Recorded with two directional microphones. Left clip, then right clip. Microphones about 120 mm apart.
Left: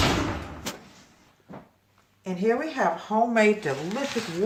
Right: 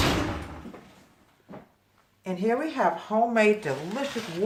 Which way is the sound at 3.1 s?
15° left (ahead or behind).